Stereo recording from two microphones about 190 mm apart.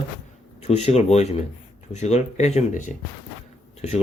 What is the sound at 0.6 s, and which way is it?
Speech, 35° left (ahead or behind).